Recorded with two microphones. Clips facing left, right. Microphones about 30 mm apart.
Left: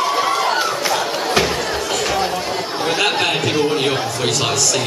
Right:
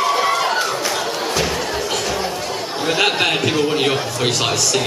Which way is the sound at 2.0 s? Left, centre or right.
Centre.